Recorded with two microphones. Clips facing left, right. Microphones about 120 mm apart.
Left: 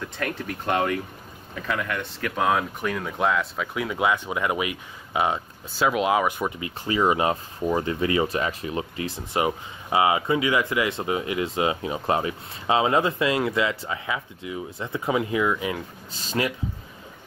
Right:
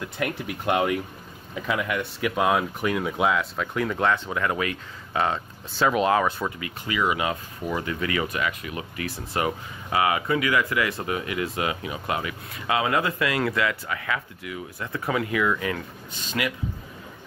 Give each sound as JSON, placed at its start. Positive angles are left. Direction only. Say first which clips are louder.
{"t": 0.2, "sound": "speech", "louder": "right 2 dB", "side_deg": -10}
{"t": 6.8, "sound": "speech", "louder": "left 4 dB", "side_deg": 35}
{"t": 16.1, "sound": "speech", "louder": "left 2 dB", "side_deg": 35}